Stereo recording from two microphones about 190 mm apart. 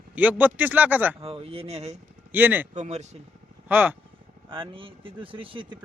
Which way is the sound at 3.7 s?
10° right (ahead or behind).